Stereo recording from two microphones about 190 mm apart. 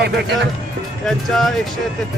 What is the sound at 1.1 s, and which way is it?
Speech, centre (ahead or behind).